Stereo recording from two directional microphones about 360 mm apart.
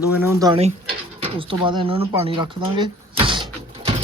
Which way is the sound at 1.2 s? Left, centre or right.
Centre.